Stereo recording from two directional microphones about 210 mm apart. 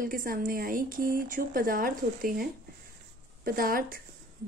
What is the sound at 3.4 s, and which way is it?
Speech, 45° right (ahead or behind).